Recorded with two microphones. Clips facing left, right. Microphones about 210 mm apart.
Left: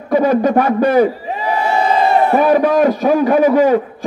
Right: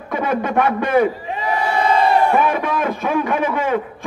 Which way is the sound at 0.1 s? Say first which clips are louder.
Left 8 dB; 35° left (ahead or behind).